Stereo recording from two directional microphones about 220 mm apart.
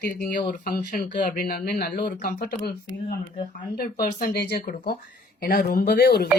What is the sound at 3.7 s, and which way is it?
Speech, 45° left (ahead or behind).